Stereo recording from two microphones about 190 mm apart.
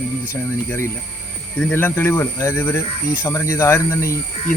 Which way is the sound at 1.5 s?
10° left (ahead or behind).